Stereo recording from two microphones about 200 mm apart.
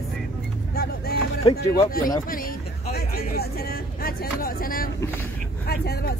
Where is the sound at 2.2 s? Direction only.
45° left (ahead or behind).